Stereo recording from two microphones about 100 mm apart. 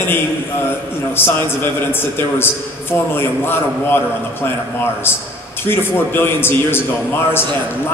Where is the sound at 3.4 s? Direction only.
20° left (ahead or behind).